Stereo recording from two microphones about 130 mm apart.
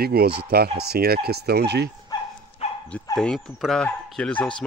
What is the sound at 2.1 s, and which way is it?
Dog, 30° left (ahead or behind).